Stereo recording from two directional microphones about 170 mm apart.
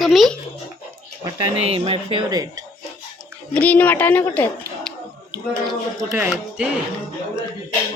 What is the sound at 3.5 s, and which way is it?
Speech, 10° left (ahead or behind).